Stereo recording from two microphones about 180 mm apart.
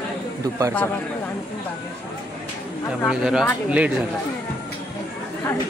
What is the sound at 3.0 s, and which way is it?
Speech, 5° right (ahead or behind).